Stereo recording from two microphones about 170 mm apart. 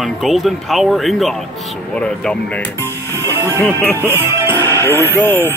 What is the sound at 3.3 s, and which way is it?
Music, 15° right (ahead or behind).